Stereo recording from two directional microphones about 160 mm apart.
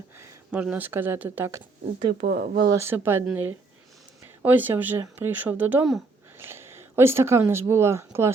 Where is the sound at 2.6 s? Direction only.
20° right (ahead or behind).